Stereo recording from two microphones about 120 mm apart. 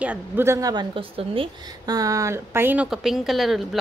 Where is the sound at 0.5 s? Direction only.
30° right (ahead or behind).